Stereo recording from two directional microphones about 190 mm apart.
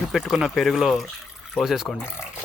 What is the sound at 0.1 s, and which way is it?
Speech, 5° right (ahead or behind).